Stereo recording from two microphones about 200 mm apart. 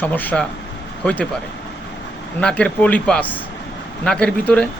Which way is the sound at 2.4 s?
5° left (ahead or behind).